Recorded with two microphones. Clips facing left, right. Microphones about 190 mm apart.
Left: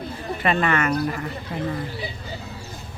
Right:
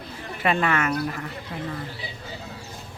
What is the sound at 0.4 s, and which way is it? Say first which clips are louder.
Speech: left 1 dB; 5° right (ahead or behind).